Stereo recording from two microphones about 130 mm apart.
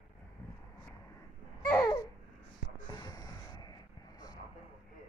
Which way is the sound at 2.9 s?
30° left (ahead or behind).